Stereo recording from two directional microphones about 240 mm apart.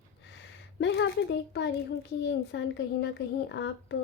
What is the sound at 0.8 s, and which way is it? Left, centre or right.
A woman's voice, left.